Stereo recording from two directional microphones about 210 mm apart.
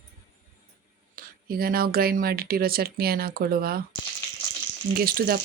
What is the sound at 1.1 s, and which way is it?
Speech, 45° right (ahead or behind).